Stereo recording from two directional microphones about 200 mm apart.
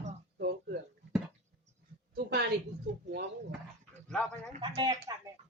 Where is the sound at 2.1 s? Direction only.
55° right (ahead or behind).